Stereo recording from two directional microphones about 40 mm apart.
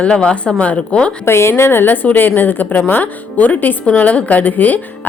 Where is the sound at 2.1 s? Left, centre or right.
Left.